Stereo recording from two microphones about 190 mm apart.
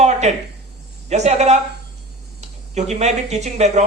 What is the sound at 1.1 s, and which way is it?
A woman's voice, 35° right (ahead or behind).